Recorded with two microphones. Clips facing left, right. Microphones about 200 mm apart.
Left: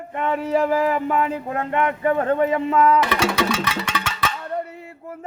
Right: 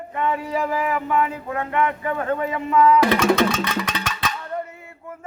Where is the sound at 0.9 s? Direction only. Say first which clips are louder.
Left 1 dB; 40° left (ahead or behind).